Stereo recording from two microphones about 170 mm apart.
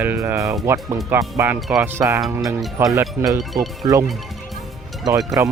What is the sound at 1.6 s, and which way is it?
Speech, 5° right (ahead or behind).